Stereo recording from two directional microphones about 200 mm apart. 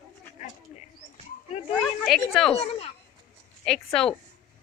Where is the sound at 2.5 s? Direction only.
30° left (ahead or behind).